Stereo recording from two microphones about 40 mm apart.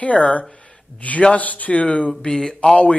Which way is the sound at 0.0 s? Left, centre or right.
Left.